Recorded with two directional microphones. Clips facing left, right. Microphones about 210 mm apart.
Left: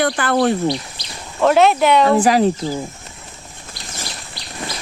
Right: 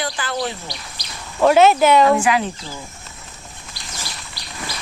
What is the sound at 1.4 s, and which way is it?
Speech, centre (ahead or behind).